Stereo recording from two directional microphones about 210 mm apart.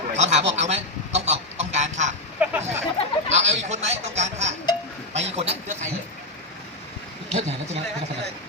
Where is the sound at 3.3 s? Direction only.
35° right (ahead or behind).